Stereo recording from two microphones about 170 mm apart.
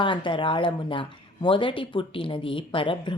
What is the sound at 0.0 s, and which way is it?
Speech, 30° left (ahead or behind).